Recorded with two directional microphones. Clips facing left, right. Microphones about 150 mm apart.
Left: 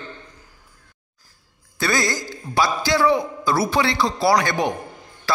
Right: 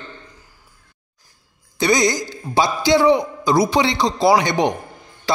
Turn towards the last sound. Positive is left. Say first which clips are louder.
# right 3 dB
turn(degrees=-20)  # may be behind; listen again after turning